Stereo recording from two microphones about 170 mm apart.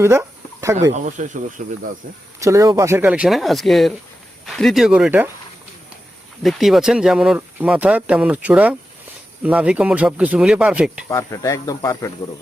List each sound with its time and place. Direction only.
0.0 s speech: 15° right (ahead or behind)
1.0 s speech: 45° right (ahead or behind)
2.4 s speech: 20° right (ahead or behind)
6.4 s speech: centre (ahead or behind)
11.1 s speech: 15° left (ahead or behind)